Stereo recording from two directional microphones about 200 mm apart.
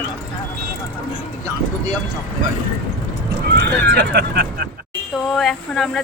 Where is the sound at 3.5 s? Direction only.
55° right (ahead or behind).